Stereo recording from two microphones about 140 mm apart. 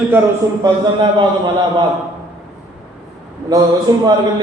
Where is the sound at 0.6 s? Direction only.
30° right (ahead or behind).